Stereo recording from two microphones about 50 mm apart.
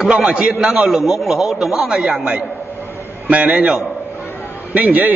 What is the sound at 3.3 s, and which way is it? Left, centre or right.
Speech, right.